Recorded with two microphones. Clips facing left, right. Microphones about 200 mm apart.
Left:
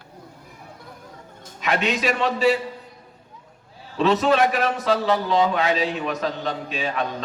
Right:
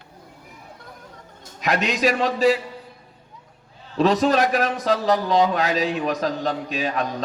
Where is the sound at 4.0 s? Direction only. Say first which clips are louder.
Even; 40° right (ahead or behind).